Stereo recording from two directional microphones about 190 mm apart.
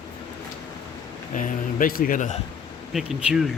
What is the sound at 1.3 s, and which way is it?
Speech, 45° left (ahead or behind).